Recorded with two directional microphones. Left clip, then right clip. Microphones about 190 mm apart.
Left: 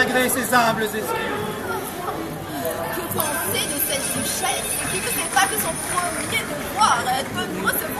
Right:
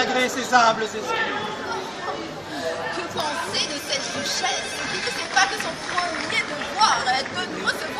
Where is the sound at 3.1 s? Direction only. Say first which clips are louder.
Left 1 dB; 10° right (ahead or behind).